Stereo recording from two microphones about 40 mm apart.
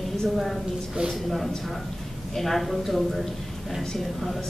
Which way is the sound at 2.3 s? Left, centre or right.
Centre.